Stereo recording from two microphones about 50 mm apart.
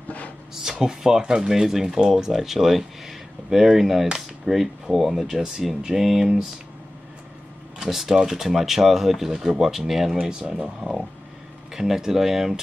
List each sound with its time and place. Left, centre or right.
0.6 s speech: centre
7.8 s speech: centre